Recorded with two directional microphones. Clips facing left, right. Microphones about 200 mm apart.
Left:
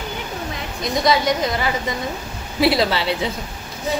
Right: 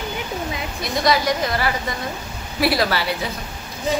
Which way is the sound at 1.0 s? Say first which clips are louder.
Left 1 dB; 25° left (ahead or behind).